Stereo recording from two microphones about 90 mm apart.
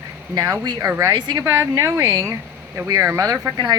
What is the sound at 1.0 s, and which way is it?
Speech, 50° right (ahead or behind).